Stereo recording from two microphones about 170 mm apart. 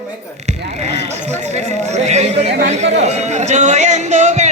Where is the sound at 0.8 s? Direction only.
40° right (ahead or behind).